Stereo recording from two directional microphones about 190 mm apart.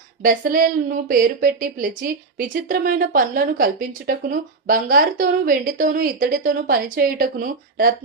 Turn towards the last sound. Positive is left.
turn(degrees=-50)  # may be behind; listen again after turning